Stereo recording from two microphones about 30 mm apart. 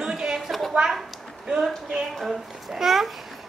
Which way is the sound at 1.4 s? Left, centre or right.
Right.